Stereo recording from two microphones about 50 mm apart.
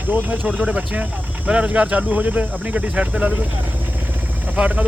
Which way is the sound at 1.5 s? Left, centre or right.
Right.